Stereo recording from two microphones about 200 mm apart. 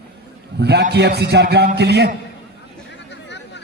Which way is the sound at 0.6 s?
55° right (ahead or behind).